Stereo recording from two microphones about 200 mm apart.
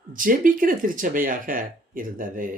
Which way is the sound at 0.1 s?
40° right (ahead or behind).